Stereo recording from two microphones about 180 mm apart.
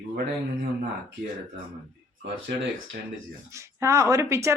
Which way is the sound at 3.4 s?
15° right (ahead or behind).